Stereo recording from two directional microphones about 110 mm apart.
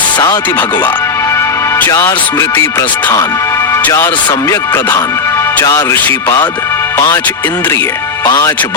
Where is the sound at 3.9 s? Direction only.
40° left (ahead or behind).